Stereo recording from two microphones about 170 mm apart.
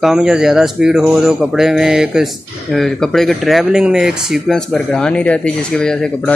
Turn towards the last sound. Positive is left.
turn(degrees=5)  # may be behind; listen again after turning